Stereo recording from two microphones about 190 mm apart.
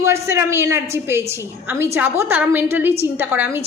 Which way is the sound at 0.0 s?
15° right (ahead or behind).